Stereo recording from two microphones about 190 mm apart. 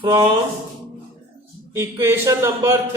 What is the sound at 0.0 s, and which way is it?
Speech, 20° right (ahead or behind).